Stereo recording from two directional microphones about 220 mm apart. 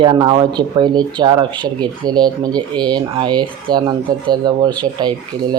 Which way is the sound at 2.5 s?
5° left (ahead or behind).